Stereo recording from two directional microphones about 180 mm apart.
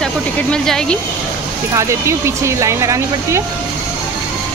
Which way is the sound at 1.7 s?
15° right (ahead or behind).